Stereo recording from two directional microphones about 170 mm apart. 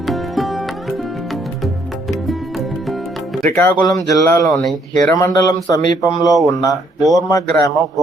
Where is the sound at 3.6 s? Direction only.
10° left (ahead or behind).